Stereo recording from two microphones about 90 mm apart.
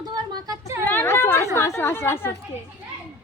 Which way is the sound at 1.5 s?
30° left (ahead or behind).